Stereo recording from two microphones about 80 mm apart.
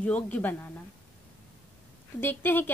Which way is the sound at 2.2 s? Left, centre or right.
Left.